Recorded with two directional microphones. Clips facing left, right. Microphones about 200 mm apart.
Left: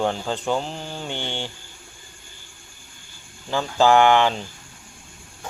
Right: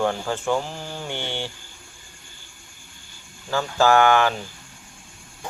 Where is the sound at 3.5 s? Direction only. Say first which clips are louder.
Left 1 dB; 15° left (ahead or behind).